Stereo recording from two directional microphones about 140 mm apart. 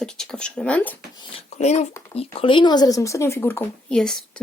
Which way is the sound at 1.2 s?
40° left (ahead or behind).